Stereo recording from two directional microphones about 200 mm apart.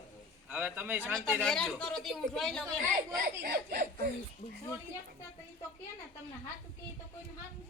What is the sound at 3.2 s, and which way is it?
Speech, 50° right (ahead or behind).